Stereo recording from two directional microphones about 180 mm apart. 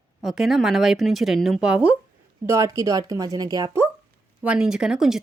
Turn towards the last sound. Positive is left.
turn(degrees=-5)  # may be behind; listen again after turning